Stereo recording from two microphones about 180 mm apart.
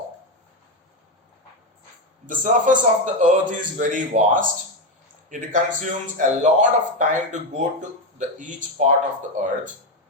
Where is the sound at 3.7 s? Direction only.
45° right (ahead or behind).